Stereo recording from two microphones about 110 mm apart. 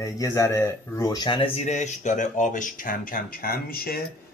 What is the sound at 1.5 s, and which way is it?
Speech, 90° left.